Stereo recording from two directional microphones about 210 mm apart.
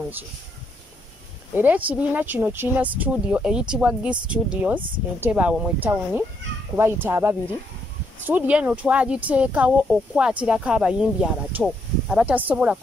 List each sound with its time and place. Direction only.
1.5 s speech: 10° right (ahead or behind)